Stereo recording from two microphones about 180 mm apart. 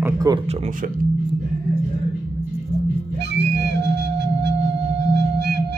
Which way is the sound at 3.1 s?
75° right (ahead or behind).